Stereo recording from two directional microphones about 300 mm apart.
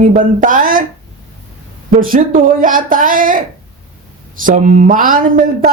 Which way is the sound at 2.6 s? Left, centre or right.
Right.